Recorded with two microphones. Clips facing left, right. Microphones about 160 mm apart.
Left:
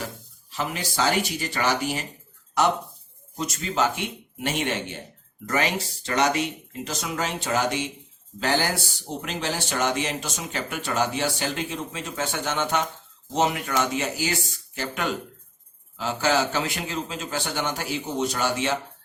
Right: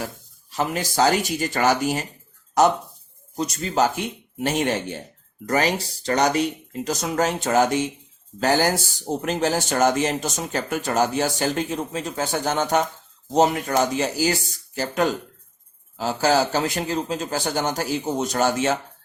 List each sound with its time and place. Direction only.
0.5 s a man's voice: 40° right (ahead or behind)